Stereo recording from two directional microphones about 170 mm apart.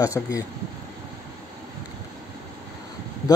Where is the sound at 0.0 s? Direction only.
20° left (ahead or behind).